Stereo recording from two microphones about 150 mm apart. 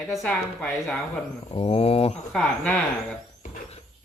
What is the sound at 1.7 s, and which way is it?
Speech, 40° left (ahead or behind).